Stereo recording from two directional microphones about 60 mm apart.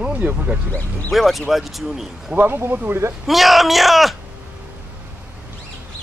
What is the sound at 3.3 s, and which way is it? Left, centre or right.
Speech, centre.